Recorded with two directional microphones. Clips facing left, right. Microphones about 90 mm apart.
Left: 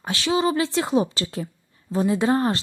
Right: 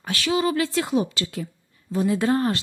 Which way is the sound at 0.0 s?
25° left (ahead or behind).